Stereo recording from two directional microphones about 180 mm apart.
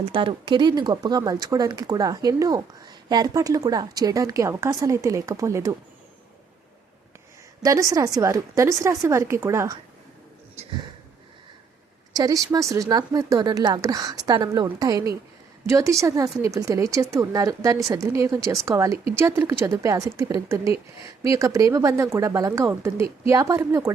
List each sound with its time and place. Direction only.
0.1 s speech: 25° right (ahead or behind)
7.6 s a woman's voice: 20° right (ahead or behind)
12.1 s a woman's voice: 20° right (ahead or behind)